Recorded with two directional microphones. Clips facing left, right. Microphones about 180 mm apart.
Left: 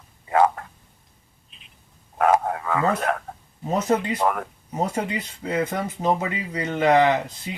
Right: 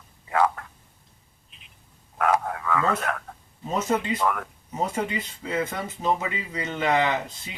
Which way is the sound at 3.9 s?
35° left (ahead or behind).